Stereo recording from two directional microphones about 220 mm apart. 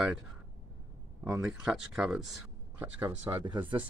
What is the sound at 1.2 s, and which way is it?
Speech, 5° right (ahead or behind).